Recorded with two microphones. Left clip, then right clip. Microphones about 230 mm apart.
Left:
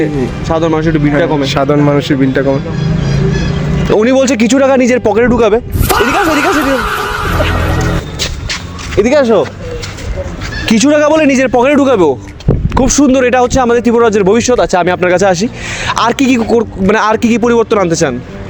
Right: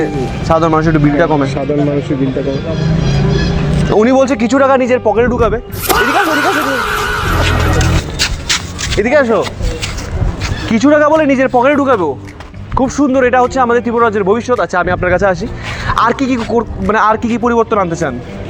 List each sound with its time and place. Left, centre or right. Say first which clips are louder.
0.4 s a man's voice: right 2 dB; centre
1.5 s speech: left 5 dB; left
3.9 s speech: left 1 dB; left
5.9 s a sound: left 1 dB; centre
9.0 s speech: left 2 dB; left
10.7 s speech: left 1 dB; left